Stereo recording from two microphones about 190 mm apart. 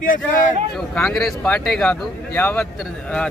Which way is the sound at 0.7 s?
5° left (ahead or behind).